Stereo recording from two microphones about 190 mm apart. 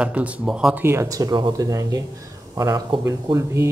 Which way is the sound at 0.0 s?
5° right (ahead or behind).